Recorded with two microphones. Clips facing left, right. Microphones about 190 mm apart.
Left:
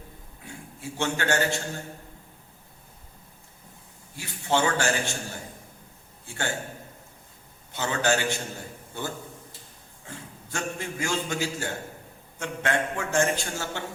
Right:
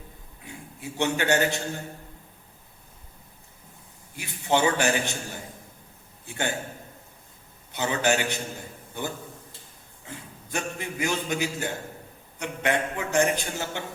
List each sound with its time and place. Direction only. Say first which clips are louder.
0.4 s a man's voice: even; 20° right (ahead or behind)
4.1 s a man's voice: right 1 dB; 15° right (ahead or behind)
6.2 s a man's voice: right 2 dB; 20° right (ahead or behind)
7.7 s a man's voice: right 1 dB; 20° right (ahead or behind)